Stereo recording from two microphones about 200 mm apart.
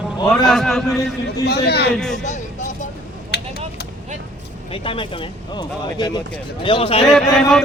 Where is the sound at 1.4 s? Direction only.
55° left (ahead or behind).